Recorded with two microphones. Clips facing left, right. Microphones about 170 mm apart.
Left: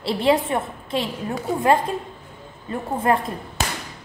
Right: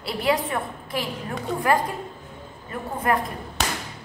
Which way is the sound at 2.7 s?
25° left (ahead or behind).